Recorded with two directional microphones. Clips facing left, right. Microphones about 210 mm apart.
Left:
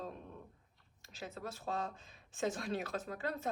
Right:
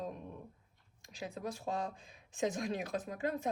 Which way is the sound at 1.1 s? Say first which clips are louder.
Right 4 dB; 15° right (ahead or behind).